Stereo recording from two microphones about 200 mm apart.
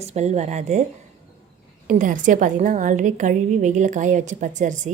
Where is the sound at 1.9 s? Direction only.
40° right (ahead or behind).